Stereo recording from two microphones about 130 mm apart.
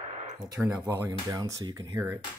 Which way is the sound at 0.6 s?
25° right (ahead or behind).